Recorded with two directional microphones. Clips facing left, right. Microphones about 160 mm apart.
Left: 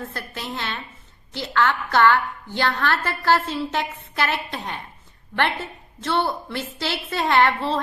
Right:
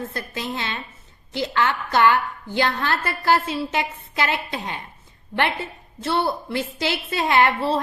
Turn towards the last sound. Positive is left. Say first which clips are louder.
# right 1 dB
turn(degrees=-10)  # may be behind; listen again after turning